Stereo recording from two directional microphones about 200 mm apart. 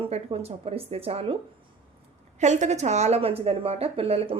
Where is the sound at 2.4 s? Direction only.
35° right (ahead or behind).